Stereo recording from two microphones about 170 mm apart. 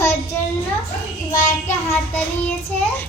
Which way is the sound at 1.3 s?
45° left (ahead or behind).